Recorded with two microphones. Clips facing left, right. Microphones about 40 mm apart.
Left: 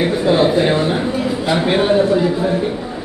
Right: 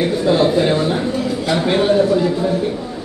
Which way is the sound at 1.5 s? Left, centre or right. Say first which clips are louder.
Even; centre.